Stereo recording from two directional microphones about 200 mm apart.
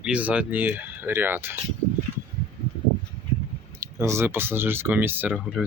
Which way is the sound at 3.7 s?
15° right (ahead or behind).